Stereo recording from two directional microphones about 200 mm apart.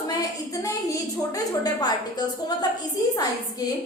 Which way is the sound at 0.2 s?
15° left (ahead or behind).